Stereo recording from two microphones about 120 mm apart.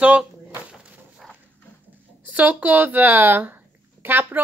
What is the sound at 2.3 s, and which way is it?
Speech, 10° right (ahead or behind).